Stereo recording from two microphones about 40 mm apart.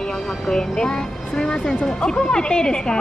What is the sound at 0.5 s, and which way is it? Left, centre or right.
Speech, centre.